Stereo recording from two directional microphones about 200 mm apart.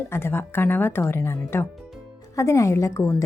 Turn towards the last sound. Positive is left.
turn(degrees=15)  # may be behind; listen again after turning